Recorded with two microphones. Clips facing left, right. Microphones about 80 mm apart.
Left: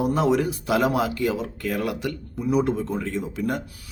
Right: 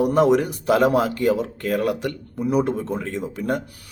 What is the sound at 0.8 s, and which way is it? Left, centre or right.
Speech, right.